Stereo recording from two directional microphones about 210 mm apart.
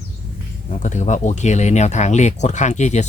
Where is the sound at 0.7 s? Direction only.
35° left (ahead or behind).